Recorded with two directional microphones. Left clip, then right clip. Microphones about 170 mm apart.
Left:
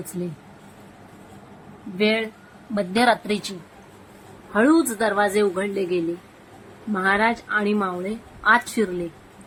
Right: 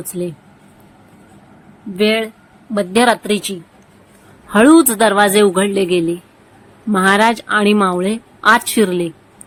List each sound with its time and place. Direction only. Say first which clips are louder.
0.1 s a woman's voice: right 9 dB; 45° right (ahead or behind)
2.0 s a woman's voice: right 6 dB; 40° right (ahead or behind)
4.5 s a woman's voice: right 9 dB; 55° right (ahead or behind)